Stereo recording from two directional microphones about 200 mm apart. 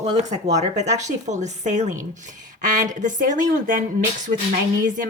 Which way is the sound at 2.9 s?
40° right (ahead or behind).